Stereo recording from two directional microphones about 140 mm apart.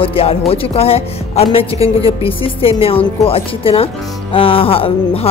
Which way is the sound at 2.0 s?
40° left (ahead or behind).